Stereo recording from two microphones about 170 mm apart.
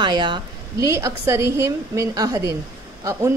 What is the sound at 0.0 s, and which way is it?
A woman's voice, 25° right (ahead or behind).